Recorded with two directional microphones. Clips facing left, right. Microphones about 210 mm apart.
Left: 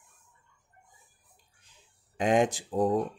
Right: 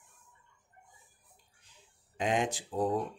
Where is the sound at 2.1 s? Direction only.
45° left (ahead or behind).